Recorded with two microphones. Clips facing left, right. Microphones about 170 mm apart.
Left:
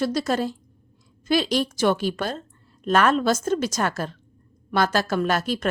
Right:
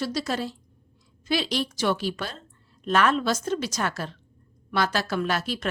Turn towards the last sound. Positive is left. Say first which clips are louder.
# left 4 dB
turn(degrees=45)  # may be behind; listen again after turning